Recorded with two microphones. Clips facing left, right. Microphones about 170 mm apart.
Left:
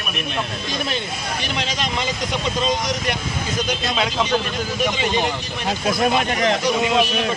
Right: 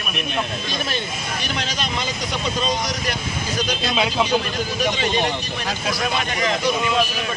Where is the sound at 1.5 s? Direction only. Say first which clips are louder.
Left 3 dB; 20° left (ahead or behind).